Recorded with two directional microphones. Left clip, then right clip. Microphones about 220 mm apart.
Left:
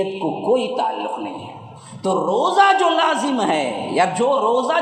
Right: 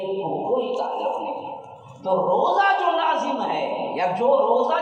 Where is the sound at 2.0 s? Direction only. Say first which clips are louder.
Left 1 dB; 55° left (ahead or behind).